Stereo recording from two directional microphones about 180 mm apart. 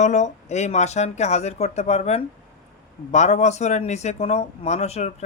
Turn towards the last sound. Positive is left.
turn(degrees=35)  # may be behind; listen again after turning